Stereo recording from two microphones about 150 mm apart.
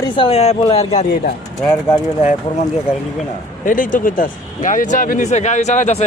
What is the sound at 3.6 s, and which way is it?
A man's voice, 60° left (ahead or behind).